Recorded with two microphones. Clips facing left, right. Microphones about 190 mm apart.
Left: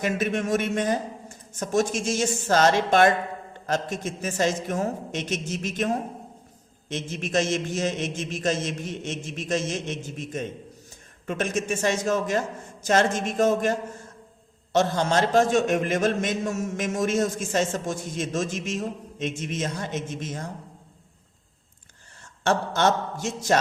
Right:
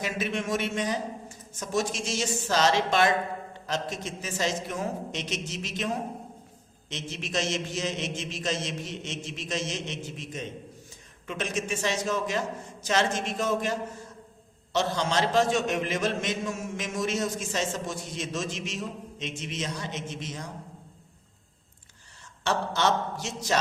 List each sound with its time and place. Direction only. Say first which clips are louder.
0.0 s a man's voice: left 5 dB; 50° left (ahead or behind)
22.4 s a man's voice: left 4 dB; 50° left (ahead or behind)